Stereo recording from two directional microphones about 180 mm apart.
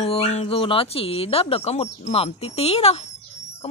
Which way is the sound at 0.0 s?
35° left (ahead or behind).